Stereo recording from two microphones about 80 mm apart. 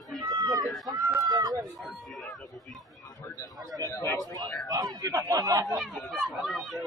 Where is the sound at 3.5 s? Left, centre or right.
Right.